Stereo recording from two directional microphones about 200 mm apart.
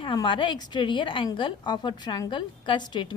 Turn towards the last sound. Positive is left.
turn(degrees=25)  # may be behind; listen again after turning